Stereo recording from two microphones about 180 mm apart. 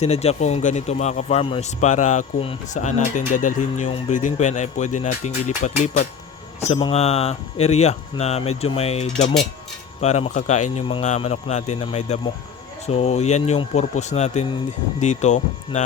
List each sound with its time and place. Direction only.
0.0 s a man's voice: 35° left (ahead or behind)
6.6 s a man's voice: 30° left (ahead or behind)